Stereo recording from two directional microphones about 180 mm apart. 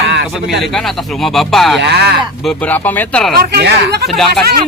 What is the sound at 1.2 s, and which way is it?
Speech, centre (ahead or behind).